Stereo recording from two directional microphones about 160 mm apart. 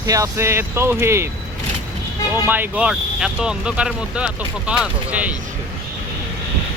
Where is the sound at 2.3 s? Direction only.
15° right (ahead or behind).